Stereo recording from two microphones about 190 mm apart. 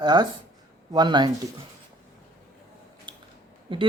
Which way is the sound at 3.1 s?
25° right (ahead or behind).